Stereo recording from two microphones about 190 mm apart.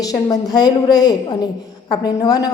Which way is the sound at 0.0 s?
20° left (ahead or behind).